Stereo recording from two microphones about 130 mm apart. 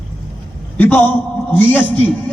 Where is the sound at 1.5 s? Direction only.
15° left (ahead or behind).